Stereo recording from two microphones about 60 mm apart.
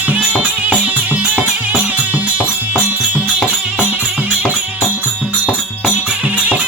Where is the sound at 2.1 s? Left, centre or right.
Right.